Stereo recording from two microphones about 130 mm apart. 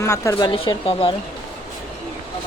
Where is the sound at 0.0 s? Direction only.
25° left (ahead or behind).